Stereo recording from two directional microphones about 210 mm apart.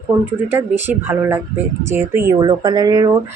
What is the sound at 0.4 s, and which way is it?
Speech, 10° right (ahead or behind).